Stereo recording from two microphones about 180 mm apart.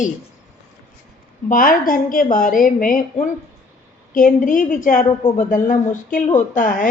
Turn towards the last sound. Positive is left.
turn(degrees=50)  # may be behind; listen again after turning